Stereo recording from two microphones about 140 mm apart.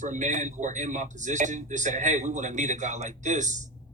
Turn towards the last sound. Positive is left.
turn(degrees=-60)  # may be behind; listen again after turning